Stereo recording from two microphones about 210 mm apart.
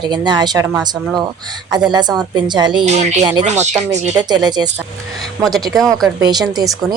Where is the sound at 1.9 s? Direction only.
20° right (ahead or behind).